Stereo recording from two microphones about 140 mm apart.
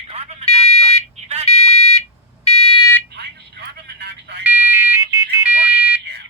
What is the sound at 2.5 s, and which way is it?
Fire alarm, 45° left (ahead or behind).